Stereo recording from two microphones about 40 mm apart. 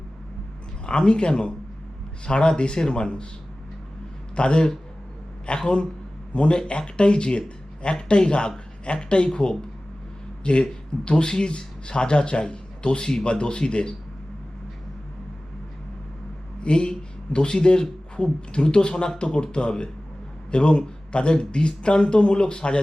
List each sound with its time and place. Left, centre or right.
0.9 s speech: left
4.4 s speech: left
16.6 s speech: left